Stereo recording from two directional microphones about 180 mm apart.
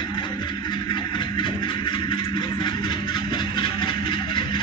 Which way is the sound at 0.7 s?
25° left (ahead or behind).